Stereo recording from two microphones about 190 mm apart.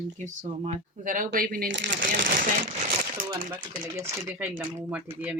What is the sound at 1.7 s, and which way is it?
Speech, 70° right (ahead or behind).